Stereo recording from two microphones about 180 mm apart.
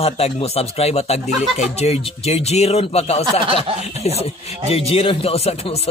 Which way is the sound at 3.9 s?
35° left (ahead or behind).